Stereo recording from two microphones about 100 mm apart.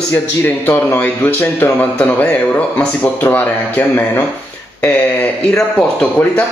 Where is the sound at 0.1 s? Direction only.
25° left (ahead or behind).